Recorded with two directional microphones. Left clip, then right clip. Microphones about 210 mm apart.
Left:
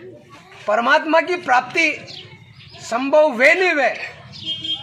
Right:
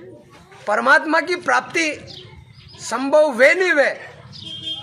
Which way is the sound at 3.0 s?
25° right (ahead or behind).